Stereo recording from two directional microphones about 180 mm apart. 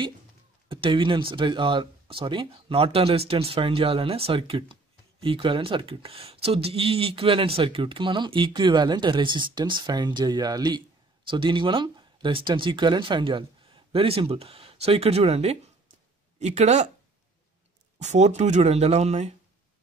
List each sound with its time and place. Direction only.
0.7 s speech: 30° right (ahead or behind)
17.9 s speech: 40° right (ahead or behind)